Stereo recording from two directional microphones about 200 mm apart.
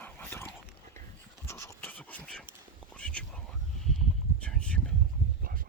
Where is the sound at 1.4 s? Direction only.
15° left (ahead or behind).